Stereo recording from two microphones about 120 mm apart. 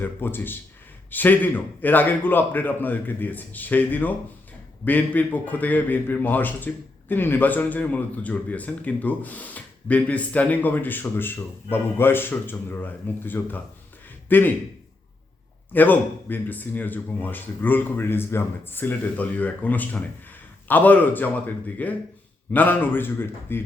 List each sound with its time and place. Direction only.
0.0 s a man's voice: 20° left (ahead or behind)
15.7 s a man's voice: 15° left (ahead or behind)